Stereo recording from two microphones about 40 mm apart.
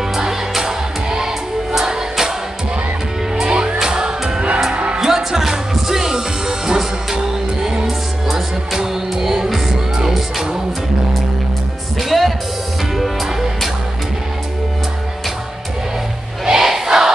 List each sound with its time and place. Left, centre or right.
0.1 s music: centre
3.3 s music: centre
5.0 s music: centre
8.7 s music: centre
12.0 s music: centre
16.4 s crowd: centre